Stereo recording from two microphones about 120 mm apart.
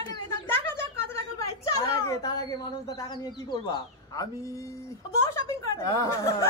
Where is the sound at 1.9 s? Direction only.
30° left (ahead or behind).